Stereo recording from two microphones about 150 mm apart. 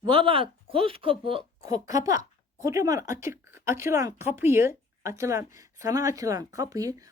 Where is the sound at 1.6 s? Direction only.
20° right (ahead or behind).